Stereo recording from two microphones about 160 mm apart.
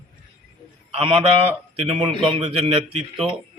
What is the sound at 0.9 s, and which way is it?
A man's voice, 35° right (ahead or behind).